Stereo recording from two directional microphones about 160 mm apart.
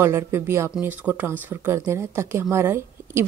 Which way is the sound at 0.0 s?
15° right (ahead or behind).